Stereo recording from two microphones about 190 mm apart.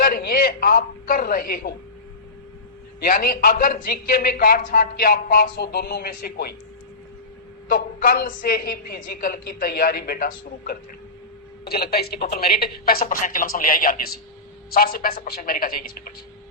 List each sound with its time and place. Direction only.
0.0 s a man's voice: 50° left (ahead or behind)
3.0 s a man's voice: 50° left (ahead or behind)
7.7 s a man's voice: 50° left (ahead or behind)